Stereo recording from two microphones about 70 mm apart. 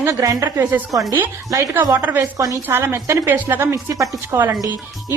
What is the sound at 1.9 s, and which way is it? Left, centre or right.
A woman's voice, right.